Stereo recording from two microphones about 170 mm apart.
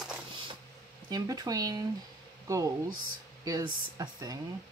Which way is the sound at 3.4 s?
25° right (ahead or behind).